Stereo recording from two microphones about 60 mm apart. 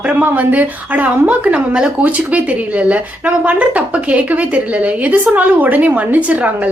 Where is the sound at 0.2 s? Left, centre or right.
Right.